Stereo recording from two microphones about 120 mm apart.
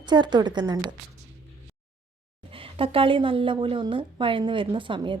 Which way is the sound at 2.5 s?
50° right (ahead or behind).